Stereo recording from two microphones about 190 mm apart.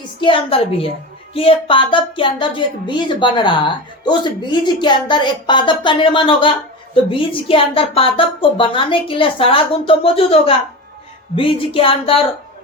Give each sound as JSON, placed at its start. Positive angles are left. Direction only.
{"t": 0.2, "sound": "speech", "side_deg": 30}